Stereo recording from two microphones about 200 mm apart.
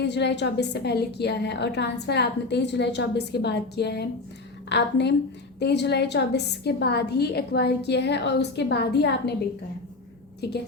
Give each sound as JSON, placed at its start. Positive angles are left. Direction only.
{"t": 0.0, "sound": "a woman's voice", "side_deg": 60}
{"t": 10.4, "sound": "a woman's voice", "side_deg": 55}